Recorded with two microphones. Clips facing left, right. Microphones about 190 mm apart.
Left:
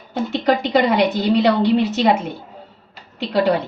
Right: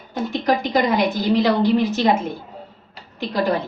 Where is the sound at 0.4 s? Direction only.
70° left (ahead or behind).